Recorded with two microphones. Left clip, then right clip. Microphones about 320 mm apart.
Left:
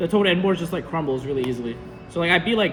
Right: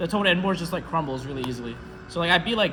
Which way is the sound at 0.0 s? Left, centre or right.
Centre.